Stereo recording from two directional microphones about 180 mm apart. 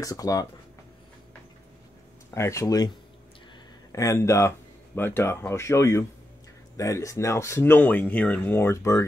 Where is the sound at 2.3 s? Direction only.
15° left (ahead or behind).